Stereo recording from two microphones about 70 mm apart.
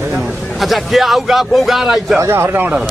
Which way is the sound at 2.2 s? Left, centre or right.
Right.